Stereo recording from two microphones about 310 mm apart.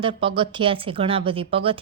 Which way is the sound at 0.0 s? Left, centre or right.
Centre.